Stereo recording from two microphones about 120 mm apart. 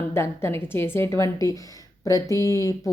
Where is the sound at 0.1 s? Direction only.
20° left (ahead or behind).